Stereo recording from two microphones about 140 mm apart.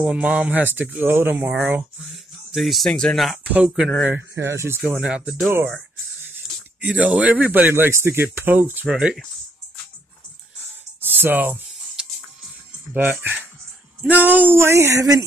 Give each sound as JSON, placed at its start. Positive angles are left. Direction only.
{"t": 0.0, "sound": "speech", "side_deg": -10}
{"t": 2.5, "sound": "speech", "side_deg": 0}
{"t": 4.1, "sound": "speech", "side_deg": -20}
{"t": 4.9, "sound": "speech", "side_deg": -5}
{"t": 6.8, "sound": "speech", "side_deg": -10}
{"t": 8.9, "sound": "speech", "side_deg": 0}
{"t": 11.1, "sound": "a sound", "side_deg": -15}
{"t": 12.9, "sound": "speech", "side_deg": -15}